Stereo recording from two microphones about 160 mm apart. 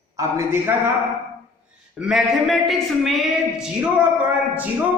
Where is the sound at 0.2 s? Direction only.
15° right (ahead or behind).